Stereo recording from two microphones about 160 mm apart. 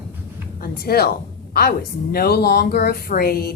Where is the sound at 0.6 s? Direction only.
70° left (ahead or behind).